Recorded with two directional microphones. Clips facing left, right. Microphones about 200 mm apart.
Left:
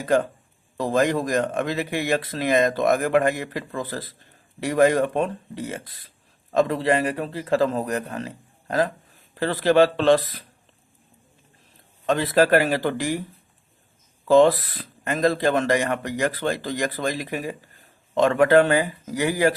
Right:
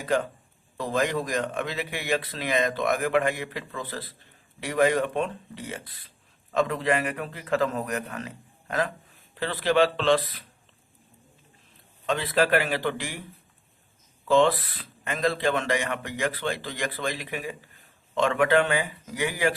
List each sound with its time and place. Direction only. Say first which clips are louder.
0.8 s speech: left 5 dB; 45° left (ahead or behind)
12.0 s speech: left 5 dB; 45° left (ahead or behind)
14.3 s speech: left 5 dB; 40° left (ahead or behind)